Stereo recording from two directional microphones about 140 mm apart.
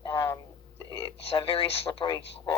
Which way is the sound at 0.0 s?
25° left (ahead or behind).